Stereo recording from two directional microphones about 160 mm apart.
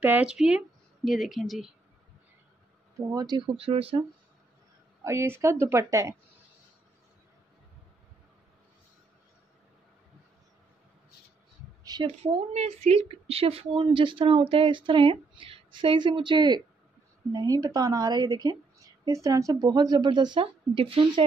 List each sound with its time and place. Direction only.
0.0 s speech: 10° right (ahead or behind)
3.1 s a woman's voice: 25° right (ahead or behind)
5.0 s a woman's voice: 15° right (ahead or behind)
11.8 s a sound: 25° right (ahead or behind)
12.2 s a woman's voice: 40° right (ahead or behind)